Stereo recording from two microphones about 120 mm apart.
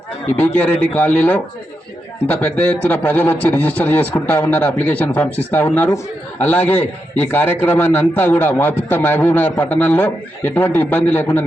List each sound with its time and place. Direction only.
0.3 s a man's voice: 10° left (ahead or behind)